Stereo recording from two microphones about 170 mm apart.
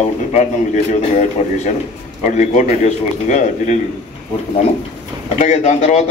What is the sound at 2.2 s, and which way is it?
Speech, 45° left (ahead or behind).